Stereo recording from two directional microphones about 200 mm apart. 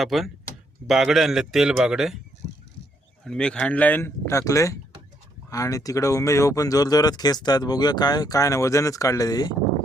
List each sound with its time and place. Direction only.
0.0 s a man's voice: centre (ahead or behind)
3.2 s speech: 5° left (ahead or behind)